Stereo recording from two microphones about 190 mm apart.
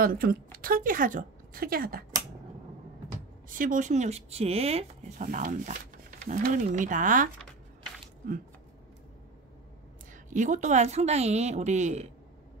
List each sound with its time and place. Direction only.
0.0 s a woman's voice: 50° right (ahead or behind)
3.4 s speech: 45° right (ahead or behind)
10.3 s speech: 40° right (ahead or behind)